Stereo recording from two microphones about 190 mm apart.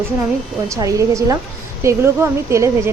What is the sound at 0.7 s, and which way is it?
Speech, 15° right (ahead or behind).